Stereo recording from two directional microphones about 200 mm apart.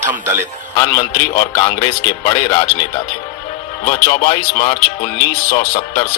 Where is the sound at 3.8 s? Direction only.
25° left (ahead or behind).